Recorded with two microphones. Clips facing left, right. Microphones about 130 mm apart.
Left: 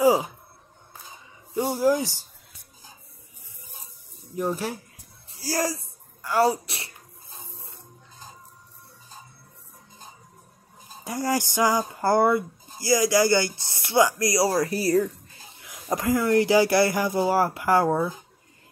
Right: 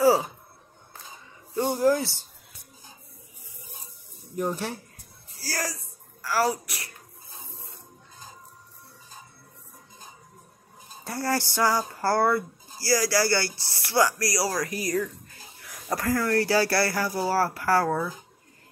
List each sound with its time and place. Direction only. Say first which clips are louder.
0.0 s a sound: left 1 dB; 15° left (ahead or behind)
1.5 s speech: even; 10° left (ahead or behind)
4.4 s speech: left 2 dB; 5° left (ahead or behind)
5.4 s speech: left 6 dB; 25° left (ahead or behind)
11.1 s speech: left 2 dB; 15° left (ahead or behind); by 15.3 s 30° left (ahead or behind)
15.6 s speech: left 2 dB; 20° left (ahead or behind)